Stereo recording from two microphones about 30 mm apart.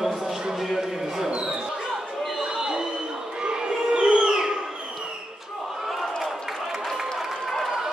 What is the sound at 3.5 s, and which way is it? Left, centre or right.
Crowd, right.